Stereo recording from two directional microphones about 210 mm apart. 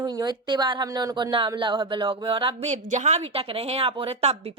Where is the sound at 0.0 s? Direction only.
20° right (ahead or behind).